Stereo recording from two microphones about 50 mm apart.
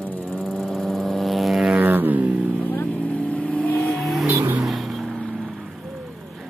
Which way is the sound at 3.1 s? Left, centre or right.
Left.